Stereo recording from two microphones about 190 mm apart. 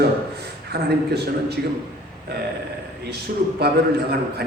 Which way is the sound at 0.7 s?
60° right (ahead or behind).